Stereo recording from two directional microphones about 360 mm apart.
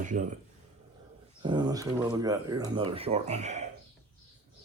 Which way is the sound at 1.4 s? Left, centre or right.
Centre.